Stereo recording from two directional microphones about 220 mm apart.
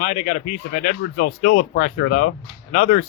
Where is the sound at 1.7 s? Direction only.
45° left (ahead or behind).